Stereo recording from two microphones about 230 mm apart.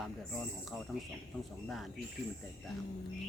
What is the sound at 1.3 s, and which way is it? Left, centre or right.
Speech, centre.